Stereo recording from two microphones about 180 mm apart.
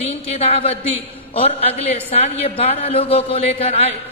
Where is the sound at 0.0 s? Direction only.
35° left (ahead or behind).